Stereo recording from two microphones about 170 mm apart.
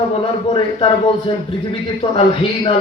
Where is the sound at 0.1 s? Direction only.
30° left (ahead or behind).